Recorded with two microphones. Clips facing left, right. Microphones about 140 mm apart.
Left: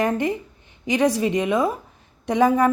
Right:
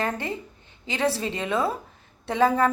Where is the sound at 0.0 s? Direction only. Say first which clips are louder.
Left 7 dB; 15° left (ahead or behind).